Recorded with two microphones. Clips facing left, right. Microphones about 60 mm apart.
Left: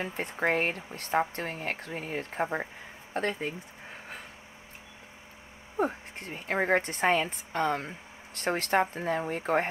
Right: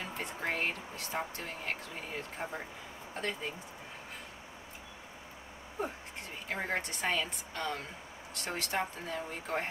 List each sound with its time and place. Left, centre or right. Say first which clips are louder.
0.0 s speech: left 7 dB; left
5.8 s a woman's voice: left 8 dB; left